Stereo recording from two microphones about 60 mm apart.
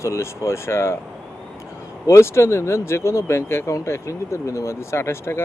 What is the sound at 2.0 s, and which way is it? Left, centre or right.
Speech, left.